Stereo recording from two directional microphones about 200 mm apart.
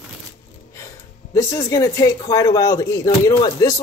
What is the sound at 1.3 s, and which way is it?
Speech, 15° left (ahead or behind).